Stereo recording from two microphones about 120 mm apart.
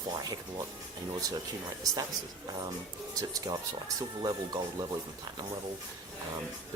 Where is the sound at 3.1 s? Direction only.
30° right (ahead or behind).